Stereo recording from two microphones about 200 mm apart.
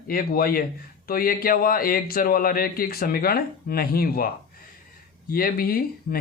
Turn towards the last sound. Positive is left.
turn(degrees=50)  # may be behind; listen again after turning